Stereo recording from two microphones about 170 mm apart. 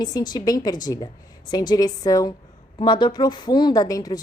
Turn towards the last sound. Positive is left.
turn(degrees=20)  # may be behind; listen again after turning